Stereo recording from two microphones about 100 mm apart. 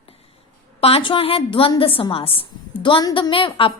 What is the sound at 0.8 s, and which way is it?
A woman's voice, 75° left (ahead or behind).